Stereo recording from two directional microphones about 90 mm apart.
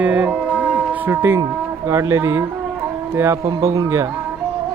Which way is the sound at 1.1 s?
25° right (ahead or behind).